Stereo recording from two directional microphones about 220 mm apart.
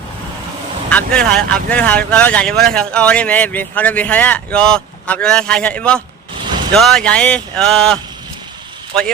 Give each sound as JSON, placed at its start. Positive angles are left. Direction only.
{"t": 0.9, "sound": "speech", "side_deg": 5}